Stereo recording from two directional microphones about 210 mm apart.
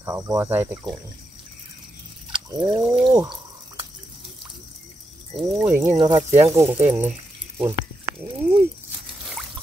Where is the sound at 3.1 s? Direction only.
20° right (ahead or behind).